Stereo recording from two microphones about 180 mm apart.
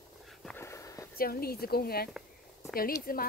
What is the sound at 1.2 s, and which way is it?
Speech, 55° left (ahead or behind).